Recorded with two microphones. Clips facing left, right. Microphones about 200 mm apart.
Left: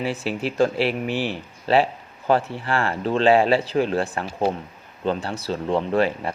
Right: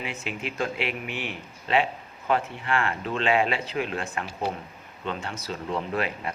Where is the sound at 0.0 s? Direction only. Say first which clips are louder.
Left 8 dB; 35° left (ahead or behind).